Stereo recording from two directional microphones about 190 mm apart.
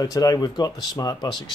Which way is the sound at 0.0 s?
20° left (ahead or behind).